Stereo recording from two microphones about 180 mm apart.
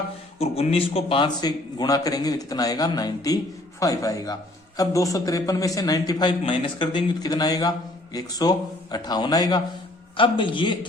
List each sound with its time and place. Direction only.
0.3 s a man's voice: 35° left (ahead or behind)